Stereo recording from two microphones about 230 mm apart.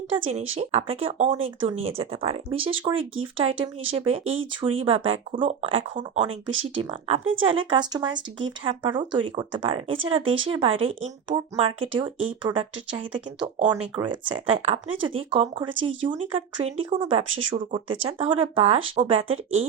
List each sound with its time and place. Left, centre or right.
0.1 s speech: right